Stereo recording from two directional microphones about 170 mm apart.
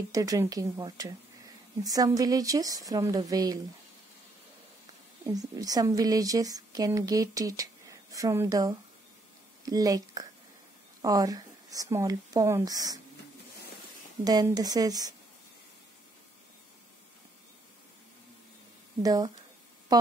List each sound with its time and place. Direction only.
0.1 s speech: 20° right (ahead or behind)
5.2 s speech: 20° right (ahead or behind)
14.2 s speech: 20° right (ahead or behind)
19.0 s speech: 20° right (ahead or behind)